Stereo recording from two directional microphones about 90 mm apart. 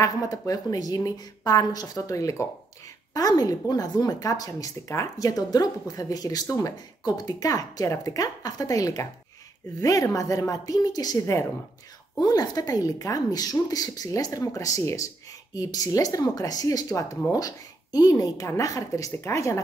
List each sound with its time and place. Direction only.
0.0 s a woman's voice: 40° left (ahead or behind)